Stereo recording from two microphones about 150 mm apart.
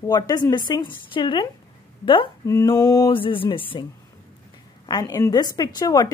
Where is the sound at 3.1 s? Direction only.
35° left (ahead or behind).